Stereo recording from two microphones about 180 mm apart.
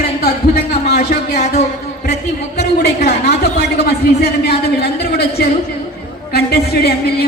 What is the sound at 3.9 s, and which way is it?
A man's voice, 65° left (ahead or behind).